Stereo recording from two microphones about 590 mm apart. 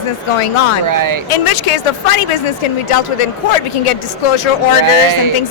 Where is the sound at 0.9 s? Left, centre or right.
Right.